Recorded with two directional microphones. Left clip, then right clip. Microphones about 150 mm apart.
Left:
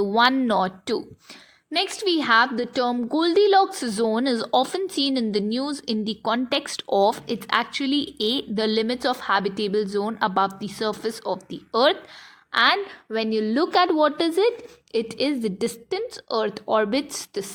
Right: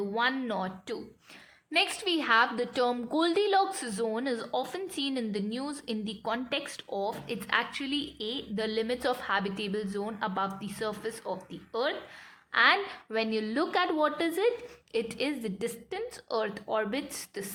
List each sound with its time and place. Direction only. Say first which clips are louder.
0.2 s a woman's voice: left 11 dB; 45° left (ahead or behind)
1.7 s a woman's voice: left 5 dB; 20° left (ahead or behind); by 7.2 s 45° left (ahead or behind)
7.2 s a woman's voice: left 6 dB; 30° left (ahead or behind)
10.6 s a woman's voice: left 8 dB; 30° left (ahead or behind)
12.5 s a woman's voice: left 5 dB; 30° left (ahead or behind)
12.7 s a woman's voice: left 4 dB; 15° left (ahead or behind)